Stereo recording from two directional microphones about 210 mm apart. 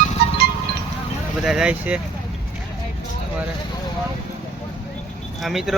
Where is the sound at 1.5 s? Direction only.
5° right (ahead or behind).